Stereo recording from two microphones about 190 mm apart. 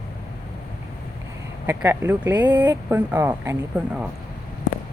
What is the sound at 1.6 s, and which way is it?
Speech, 10° right (ahead or behind).